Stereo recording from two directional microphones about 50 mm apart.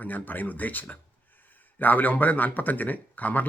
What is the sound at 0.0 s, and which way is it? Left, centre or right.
A man's voice, left.